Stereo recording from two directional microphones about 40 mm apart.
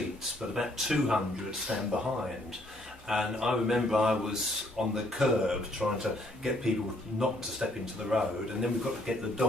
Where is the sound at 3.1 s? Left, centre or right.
Centre.